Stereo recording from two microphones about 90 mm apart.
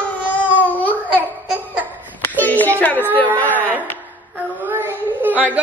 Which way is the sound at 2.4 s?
20° left (ahead or behind).